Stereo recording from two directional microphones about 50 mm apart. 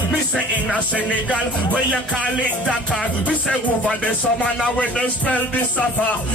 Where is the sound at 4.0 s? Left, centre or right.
Left.